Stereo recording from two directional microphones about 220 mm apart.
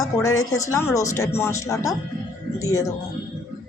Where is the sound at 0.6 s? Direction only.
15° left (ahead or behind).